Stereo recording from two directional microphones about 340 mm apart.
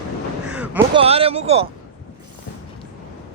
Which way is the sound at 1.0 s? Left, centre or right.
Centre.